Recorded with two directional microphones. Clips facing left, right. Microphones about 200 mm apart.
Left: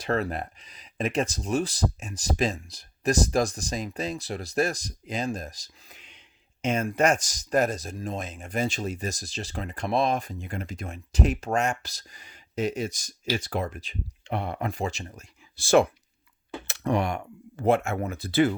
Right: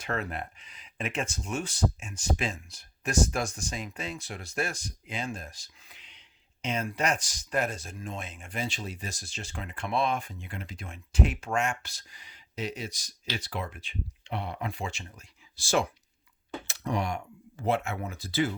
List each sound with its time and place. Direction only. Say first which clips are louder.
0.0 s speech: left 6 dB; 35° left (ahead or behind); by 15.9 s 60° left (ahead or behind)
16.6 s computer keyboard: left 5 dB; 60° left (ahead or behind)
17.6 s speech: left 6 dB; 50° left (ahead or behind)